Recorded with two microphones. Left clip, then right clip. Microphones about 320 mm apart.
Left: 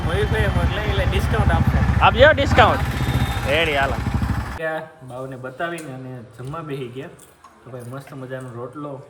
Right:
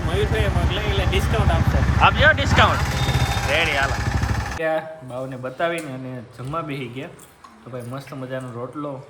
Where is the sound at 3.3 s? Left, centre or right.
Right.